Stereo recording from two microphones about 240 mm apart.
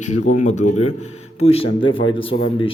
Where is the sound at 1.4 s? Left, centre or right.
Left.